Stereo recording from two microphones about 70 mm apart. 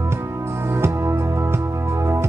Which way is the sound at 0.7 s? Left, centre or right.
Right.